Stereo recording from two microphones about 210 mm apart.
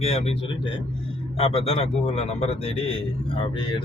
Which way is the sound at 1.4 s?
30° left (ahead or behind).